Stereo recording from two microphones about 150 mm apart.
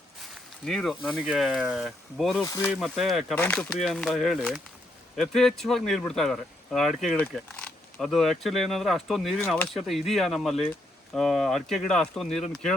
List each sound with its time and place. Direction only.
0.6 s speech: centre (ahead or behind)
2.4 s speech: 15° left (ahead or behind)
2.6 s speech: centre (ahead or behind)
3.3 s speech: 10° left (ahead or behind)